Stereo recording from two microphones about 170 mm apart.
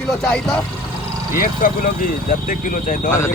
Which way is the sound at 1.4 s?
50° left (ahead or behind).